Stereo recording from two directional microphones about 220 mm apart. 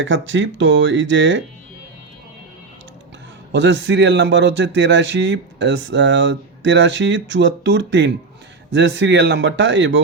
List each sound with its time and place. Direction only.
0.0 s speech: 55° right (ahead or behind)
3.5 s speech: 55° right (ahead or behind)